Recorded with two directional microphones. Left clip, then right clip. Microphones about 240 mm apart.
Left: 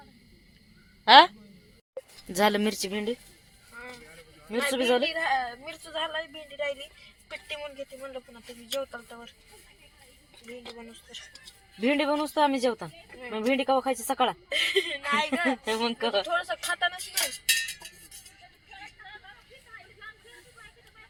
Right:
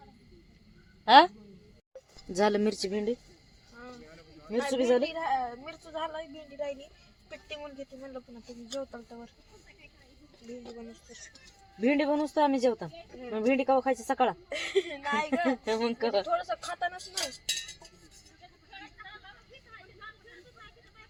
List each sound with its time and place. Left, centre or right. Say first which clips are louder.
1.0 s a man's voice: left 3 dB; centre
2.3 s speech: left 2 dB; centre
4.5 s speech: left 1 dB; centre
5.1 s speech: left 3 dB; centre
7.3 s speech: left 5 dB; centre
10.6 s speech: left 2 dB; centre
11.8 s speech: left 1 dB; centre
14.5 s speech: left 5 dB; centre
15.4 s speech: left 2 dB; centre
16.2 s speech: left 2 dB; centre